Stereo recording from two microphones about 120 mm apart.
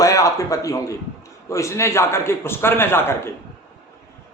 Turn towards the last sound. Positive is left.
turn(degrees=20)  # may be behind; listen again after turning